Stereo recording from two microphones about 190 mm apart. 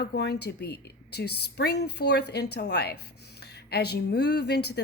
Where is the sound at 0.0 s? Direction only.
60° left (ahead or behind).